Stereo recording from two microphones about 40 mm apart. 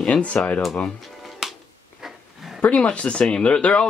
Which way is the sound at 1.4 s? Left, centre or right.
Centre.